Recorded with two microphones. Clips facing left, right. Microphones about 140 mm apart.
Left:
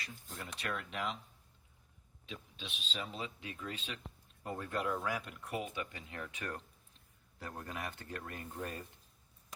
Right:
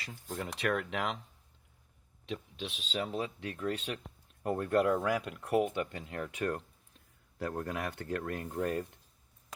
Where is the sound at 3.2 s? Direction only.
55° right (ahead or behind).